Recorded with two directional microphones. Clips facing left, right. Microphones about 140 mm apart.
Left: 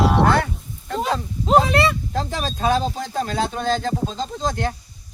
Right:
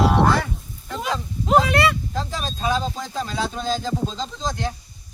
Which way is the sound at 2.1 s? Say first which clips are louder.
Left 3 dB; 55° left (ahead or behind).